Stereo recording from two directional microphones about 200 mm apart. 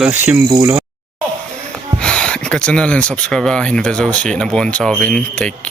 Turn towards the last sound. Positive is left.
turn(degrees=5)  # may be behind; listen again after turning